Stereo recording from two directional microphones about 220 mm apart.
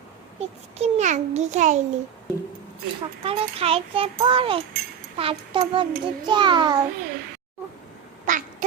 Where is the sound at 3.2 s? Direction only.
25° right (ahead or behind).